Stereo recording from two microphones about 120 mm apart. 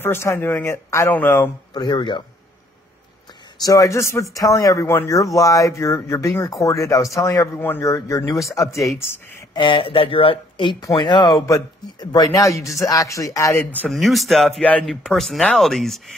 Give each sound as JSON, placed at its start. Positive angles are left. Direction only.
{"t": 0.0, "sound": "speech", "side_deg": 20}
{"t": 1.7, "sound": "speech", "side_deg": 40}
{"t": 3.6, "sound": "speech", "side_deg": 30}
{"t": 9.5, "sound": "speech", "side_deg": 40}
{"t": 13.9, "sound": "speech", "side_deg": 0}
{"t": 14.6, "sound": "speech", "side_deg": 10}